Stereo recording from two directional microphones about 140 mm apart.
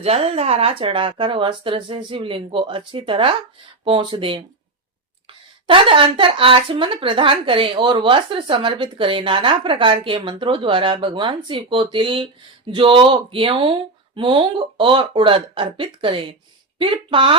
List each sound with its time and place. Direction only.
0.0 s speech: 45° right (ahead or behind)
5.6 s speech: 40° right (ahead or behind)